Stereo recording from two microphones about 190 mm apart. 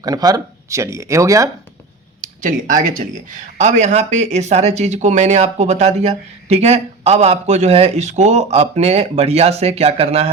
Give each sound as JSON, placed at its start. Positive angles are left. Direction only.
{"t": 0.0, "sound": "speech", "side_deg": -20}
{"t": 2.2, "sound": "speech", "side_deg": -45}